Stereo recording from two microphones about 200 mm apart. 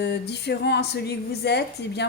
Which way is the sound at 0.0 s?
55° left (ahead or behind).